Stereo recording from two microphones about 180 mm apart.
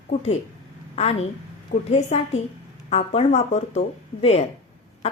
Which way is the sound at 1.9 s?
40° left (ahead or behind).